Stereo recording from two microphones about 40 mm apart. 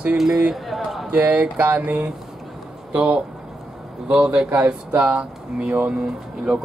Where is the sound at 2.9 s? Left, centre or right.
Right.